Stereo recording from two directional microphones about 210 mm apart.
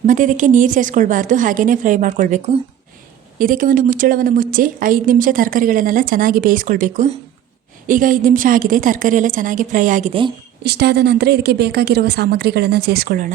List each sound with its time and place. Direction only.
0.0 s a woman's voice: 35° right (ahead or behind)
10.6 s speech: 50° right (ahead or behind)